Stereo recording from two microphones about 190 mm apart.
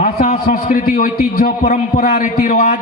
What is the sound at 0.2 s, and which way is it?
A man's voice, 50° left (ahead or behind).